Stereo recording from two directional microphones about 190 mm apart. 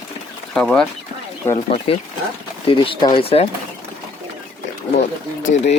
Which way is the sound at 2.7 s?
25° left (ahead or behind).